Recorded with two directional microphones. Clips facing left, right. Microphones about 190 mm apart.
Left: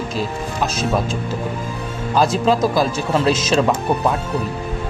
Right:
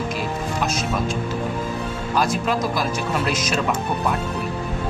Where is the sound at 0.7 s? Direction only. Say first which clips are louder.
Left 3 dB; 30° left (ahead or behind).